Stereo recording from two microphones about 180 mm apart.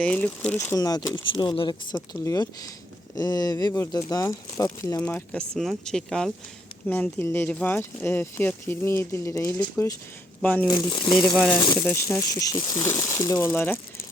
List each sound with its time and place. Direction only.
0.0 s speech: 5° left (ahead or behind)
5.0 s speech: 5° left (ahead or behind)
10.7 s speech: 25° left (ahead or behind)